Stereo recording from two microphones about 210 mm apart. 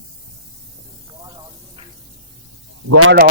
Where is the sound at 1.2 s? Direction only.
15° right (ahead or behind).